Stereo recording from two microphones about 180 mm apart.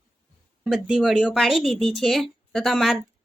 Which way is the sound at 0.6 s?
5° right (ahead or behind).